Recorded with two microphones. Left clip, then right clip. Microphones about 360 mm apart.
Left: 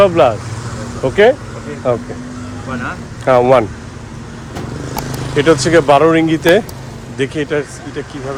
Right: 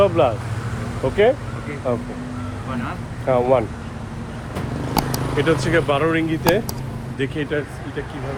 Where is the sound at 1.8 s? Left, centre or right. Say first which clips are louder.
Left 8 dB; left.